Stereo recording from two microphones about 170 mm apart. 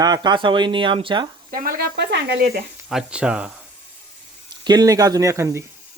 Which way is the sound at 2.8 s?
5° right (ahead or behind).